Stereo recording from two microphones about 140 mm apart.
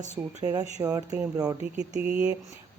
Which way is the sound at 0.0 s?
55° right (ahead or behind).